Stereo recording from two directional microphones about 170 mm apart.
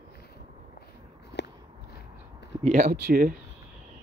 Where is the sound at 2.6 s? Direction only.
55° right (ahead or behind).